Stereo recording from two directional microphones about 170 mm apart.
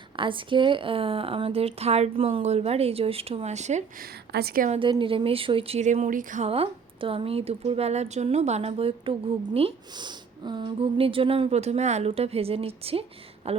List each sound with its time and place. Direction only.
0.2 s a woman's voice: 30° right (ahead or behind)
4.0 s speech: 70° right (ahead or behind)
4.7 s a woman's voice: 30° right (ahead or behind); by 6.5 s 50° right (ahead or behind)
6.5 s a woman's voice: 35° right (ahead or behind)